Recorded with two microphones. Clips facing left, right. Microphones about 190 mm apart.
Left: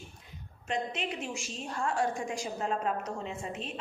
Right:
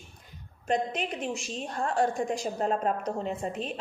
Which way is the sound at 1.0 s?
40° right (ahead or behind).